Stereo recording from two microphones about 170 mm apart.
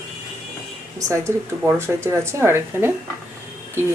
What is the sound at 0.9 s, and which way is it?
A woman's voice, 20° right (ahead or behind).